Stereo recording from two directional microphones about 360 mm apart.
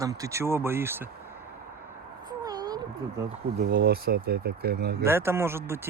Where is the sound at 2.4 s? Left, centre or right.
Centre.